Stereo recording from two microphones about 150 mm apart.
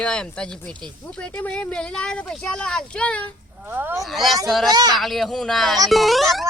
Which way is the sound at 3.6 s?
15° right (ahead or behind).